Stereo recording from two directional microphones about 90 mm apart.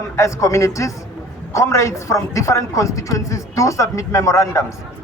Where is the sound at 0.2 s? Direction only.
35° left (ahead or behind).